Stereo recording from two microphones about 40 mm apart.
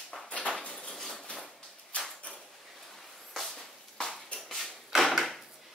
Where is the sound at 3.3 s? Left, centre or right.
Centre.